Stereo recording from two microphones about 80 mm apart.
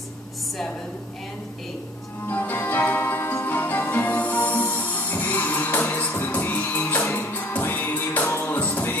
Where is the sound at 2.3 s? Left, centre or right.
Left.